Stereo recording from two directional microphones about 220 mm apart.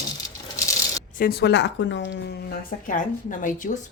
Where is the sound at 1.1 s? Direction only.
40° left (ahead or behind).